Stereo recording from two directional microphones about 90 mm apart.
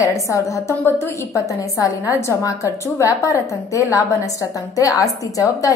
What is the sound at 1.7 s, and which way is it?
A woman's voice, 40° left (ahead or behind).